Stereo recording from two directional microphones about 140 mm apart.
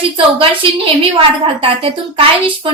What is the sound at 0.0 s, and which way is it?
A woman's voice, 40° right (ahead or behind).